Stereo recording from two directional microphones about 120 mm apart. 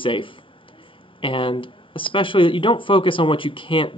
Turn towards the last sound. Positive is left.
turn(degrees=45)  # may be behind; listen again after turning